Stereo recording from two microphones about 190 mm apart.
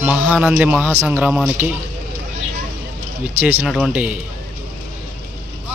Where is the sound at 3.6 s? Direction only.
5° right (ahead or behind).